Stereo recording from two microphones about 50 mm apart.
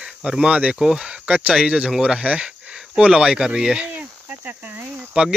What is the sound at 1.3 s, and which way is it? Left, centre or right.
Cricket, right.